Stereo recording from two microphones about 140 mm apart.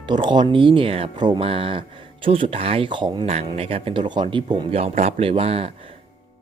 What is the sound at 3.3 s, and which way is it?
Speech, 45° right (ahead or behind).